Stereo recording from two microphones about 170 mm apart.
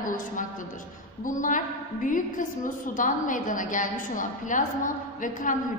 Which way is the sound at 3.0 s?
50° left (ahead or behind).